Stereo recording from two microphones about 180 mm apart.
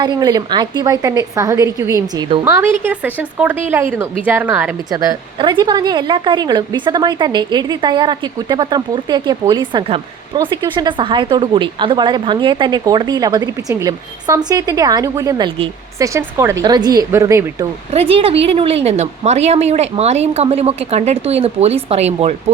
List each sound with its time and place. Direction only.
0.0 s speech: 20° right (ahead or behind)
16.0 s speech: 15° right (ahead or behind)
17.9 s a woman's voice: 30° right (ahead or behind)